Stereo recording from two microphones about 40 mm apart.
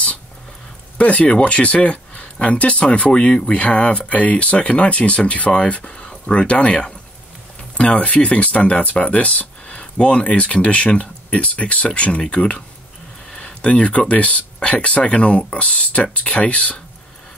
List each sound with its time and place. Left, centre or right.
0.9 s speech: left